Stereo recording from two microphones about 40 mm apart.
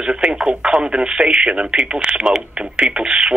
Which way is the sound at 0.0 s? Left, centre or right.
Right.